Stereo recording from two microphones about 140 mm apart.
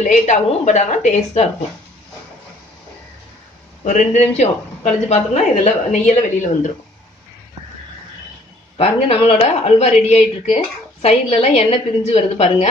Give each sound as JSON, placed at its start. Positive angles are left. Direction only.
{"t": 0.0, "sound": "speech", "side_deg": 60}
{"t": 3.8, "sound": "speech", "side_deg": 60}
{"t": 8.7, "sound": "a woman's voice", "side_deg": 45}